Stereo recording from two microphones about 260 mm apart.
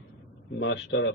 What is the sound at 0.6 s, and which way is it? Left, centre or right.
Speech, left.